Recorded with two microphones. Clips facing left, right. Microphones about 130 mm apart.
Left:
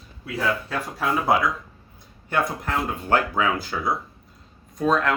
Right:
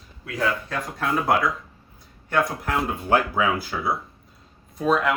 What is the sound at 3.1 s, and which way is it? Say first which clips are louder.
Speech: right 1 dB; 10° right (ahead or behind).